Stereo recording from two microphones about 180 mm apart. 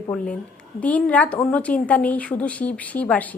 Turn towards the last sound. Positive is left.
turn(degrees=10)  # may be behind; listen again after turning